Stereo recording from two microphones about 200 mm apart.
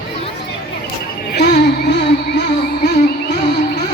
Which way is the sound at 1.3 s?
55° left (ahead or behind).